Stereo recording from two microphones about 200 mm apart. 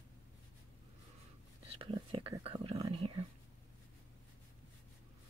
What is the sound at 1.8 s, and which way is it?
Whispering, 25° right (ahead or behind).